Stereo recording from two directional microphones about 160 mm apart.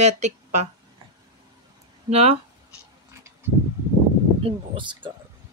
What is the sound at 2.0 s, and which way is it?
Speech, 40° right (ahead or behind).